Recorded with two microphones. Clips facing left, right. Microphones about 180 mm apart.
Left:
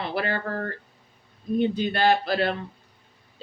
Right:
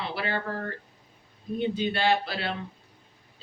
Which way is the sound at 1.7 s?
45° left (ahead or behind).